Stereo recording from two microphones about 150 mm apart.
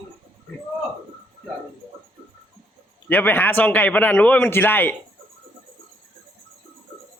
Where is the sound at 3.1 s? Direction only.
15° left (ahead or behind).